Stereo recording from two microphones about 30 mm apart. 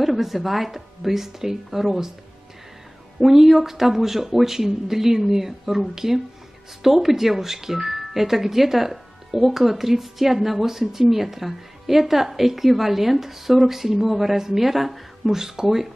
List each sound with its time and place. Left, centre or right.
0.0 s speech: centre
3.2 s speech: centre
15.4 s speech: centre